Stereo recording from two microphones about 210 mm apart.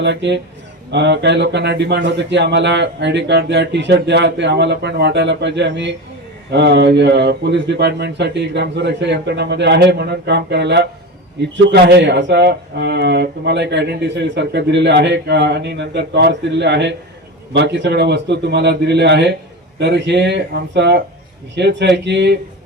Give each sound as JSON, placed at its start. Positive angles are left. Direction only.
{"t": 0.0, "sound": "speech", "side_deg": -55}